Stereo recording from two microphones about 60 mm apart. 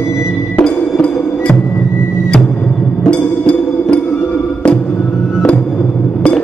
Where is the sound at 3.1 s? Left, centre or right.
Centre.